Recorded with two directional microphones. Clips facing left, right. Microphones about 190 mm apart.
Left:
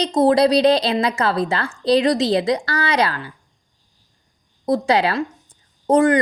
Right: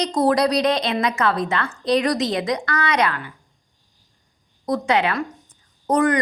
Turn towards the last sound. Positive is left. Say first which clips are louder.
# left 4 dB
turn(degrees=25)  # may be behind; listen again after turning